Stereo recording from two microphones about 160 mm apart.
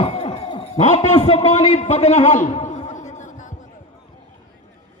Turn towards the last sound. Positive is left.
turn(degrees=50)  # may be behind; listen again after turning